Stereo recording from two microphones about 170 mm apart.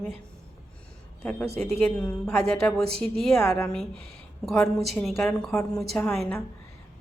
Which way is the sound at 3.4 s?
15° left (ahead or behind).